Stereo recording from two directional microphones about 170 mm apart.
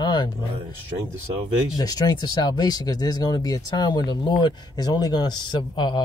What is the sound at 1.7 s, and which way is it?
Speech, 25° left (ahead or behind).